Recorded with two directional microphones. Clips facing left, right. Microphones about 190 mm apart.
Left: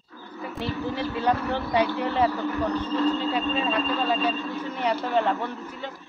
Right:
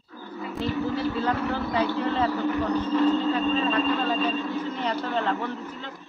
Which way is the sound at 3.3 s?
10° left (ahead or behind).